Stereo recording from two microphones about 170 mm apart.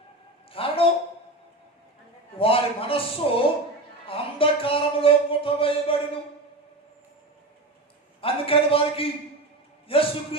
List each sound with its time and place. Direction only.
0.5 s a sound: 35° left (ahead or behind)
2.4 s a man's voice: 35° left (ahead or behind)
4.0 s music: 35° left (ahead or behind)
8.2 s a man's voice: 35° left (ahead or behind)